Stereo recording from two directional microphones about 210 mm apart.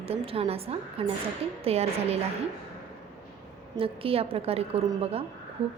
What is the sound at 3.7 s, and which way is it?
A woman's voice, 25° right (ahead or behind).